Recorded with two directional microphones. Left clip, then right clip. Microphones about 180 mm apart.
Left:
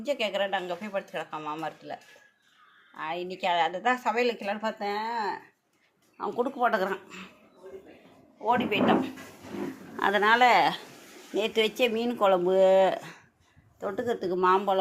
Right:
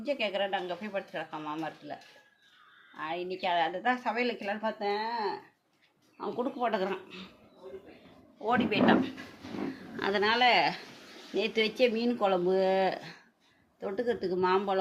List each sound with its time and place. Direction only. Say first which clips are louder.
0.0 s a woman's voice: left 3 dB; 15° left (ahead or behind)
8.4 s speech: left 2 dB; 5° right (ahead or behind)
10.0 s a woman's voice: left 5 dB; 10° left (ahead or behind)